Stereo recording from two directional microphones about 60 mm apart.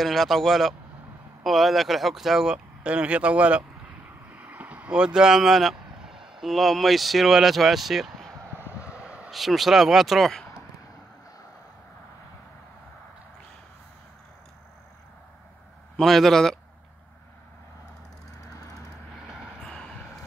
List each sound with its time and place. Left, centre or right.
0.0 s speech: centre
2.8 s speech: right; by 8.3 s centre
8.7 s vehicle: centre
9.3 s speech: centre
16.0 s speech: centre
19.1 s vehicle: centre
19.6 s a sound: centre